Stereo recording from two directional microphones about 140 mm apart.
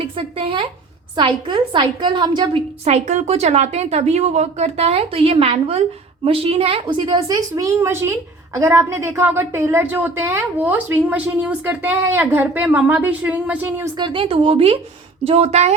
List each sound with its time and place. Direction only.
0.2 s a woman's voice: 40° right (ahead or behind)
2.8 s a woman's voice: 55° right (ahead or behind); by 13.9 s 15° right (ahead or behind)
13.9 s a woman's voice: 35° right (ahead or behind)